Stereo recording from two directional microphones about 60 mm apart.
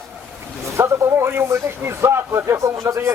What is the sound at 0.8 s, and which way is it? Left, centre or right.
A man's voice, right.